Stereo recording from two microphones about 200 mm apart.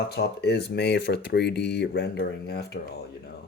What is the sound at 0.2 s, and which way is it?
Speech, 55° left (ahead or behind).